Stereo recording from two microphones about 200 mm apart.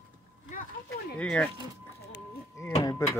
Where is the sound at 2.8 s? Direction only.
20° left (ahead or behind).